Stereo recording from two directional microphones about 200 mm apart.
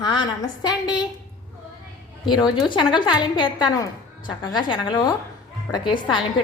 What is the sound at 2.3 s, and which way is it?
A woman's voice, 20° left (ahead or behind).